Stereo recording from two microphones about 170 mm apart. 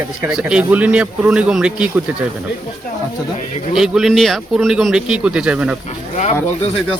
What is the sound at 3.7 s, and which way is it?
A man's voice, centre (ahead or behind).